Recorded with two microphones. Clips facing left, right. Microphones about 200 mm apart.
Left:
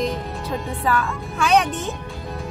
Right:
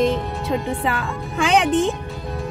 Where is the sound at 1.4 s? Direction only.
90° right.